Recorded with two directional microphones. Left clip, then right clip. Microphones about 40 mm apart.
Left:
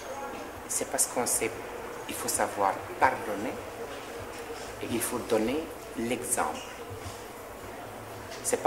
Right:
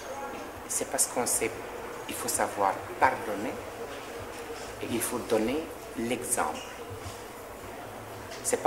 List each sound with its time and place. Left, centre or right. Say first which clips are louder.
0.7 s speech: even; left
4.8 s speech: even; left
8.5 s speech: even; left